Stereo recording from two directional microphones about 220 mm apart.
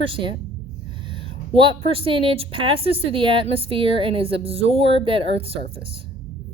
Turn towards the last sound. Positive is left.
turn(degrees=-25)  # may be behind; listen again after turning